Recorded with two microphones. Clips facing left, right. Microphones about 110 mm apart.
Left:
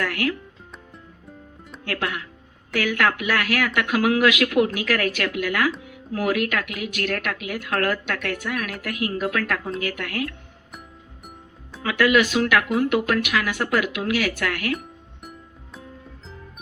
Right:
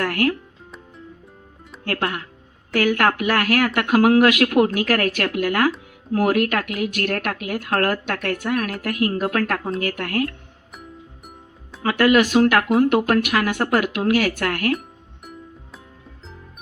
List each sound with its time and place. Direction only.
0.0 s speech: 45° right (ahead or behind)
1.8 s speech: 40° right (ahead or behind)
11.8 s speech: 45° right (ahead or behind)